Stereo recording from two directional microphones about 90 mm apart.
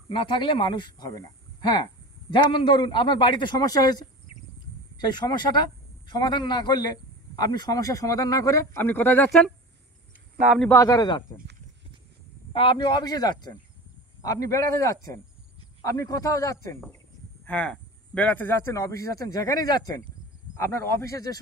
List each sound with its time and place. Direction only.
0.1 s speech: 65° left (ahead or behind); by 4.0 s 45° left (ahead or behind)
5.1 s speech: 50° left (ahead or behind); by 8.8 s 35° left (ahead or behind)
8.8 s speech: 20° left (ahead or behind)
10.7 s speech: 40° left (ahead or behind)
12.5 s speech: 60° left (ahead or behind); by 16.7 s 40° left (ahead or behind)
17.5 s speech: 15° left (ahead or behind)
18.7 s speech: 35° left (ahead or behind)
20.5 s speech: 30° left (ahead or behind)